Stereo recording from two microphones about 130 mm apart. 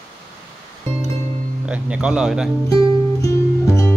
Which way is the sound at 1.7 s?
10° right (ahead or behind).